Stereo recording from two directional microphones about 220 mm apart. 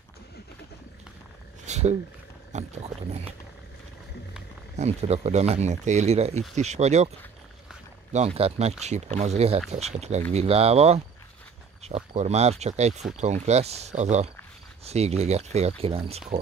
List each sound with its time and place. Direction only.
1.7 s a sound: 30° right (ahead or behind)
2.5 s speech: 30° right (ahead or behind)
4.7 s speech: 30° right (ahead or behind)
8.1 s speech: 30° right (ahead or behind)